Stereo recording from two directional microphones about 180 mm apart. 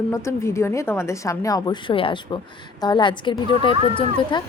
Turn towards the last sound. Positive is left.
turn(degrees=25)  # may be behind; listen again after turning